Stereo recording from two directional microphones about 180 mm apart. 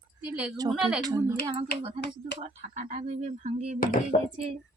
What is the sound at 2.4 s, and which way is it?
Speech, 40° right (ahead or behind).